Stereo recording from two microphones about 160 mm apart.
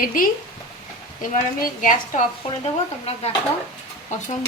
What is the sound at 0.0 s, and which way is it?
A woman's voice, 60° left (ahead or behind).